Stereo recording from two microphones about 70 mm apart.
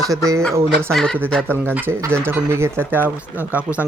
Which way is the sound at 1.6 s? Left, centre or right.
Right.